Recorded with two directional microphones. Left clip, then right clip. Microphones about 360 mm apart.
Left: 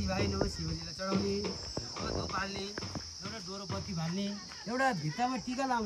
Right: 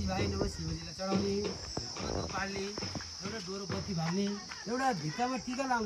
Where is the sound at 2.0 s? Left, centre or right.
Centre.